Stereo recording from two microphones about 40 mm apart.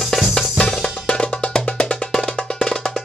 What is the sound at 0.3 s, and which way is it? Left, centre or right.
Music, centre.